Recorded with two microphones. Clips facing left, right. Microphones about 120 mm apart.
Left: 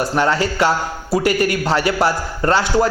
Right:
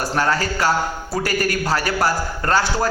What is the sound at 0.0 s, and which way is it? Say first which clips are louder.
A man's voice: left 3 dB; 25° left (ahead or behind).